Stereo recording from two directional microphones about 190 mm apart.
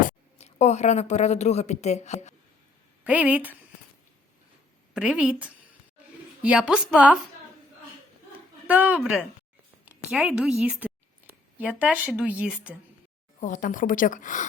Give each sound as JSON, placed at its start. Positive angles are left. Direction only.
{"t": 0.0, "sound": "a woman's voice", "side_deg": 40}
{"t": 3.0, "sound": "speech", "side_deg": -10}
{"t": 4.9, "sound": "a woman's voice", "side_deg": -5}
{"t": 8.3, "sound": "a sound", "side_deg": -10}
{"t": 9.8, "sound": "a woman's voice", "side_deg": -5}
{"t": 13.4, "sound": "a woman's voice", "side_deg": 45}